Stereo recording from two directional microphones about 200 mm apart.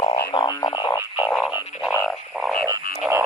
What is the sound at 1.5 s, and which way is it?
Frog, 10° right (ahead or behind).